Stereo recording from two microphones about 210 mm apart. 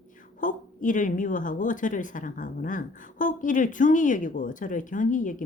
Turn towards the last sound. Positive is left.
turn(degrees=40)  # may be behind; listen again after turning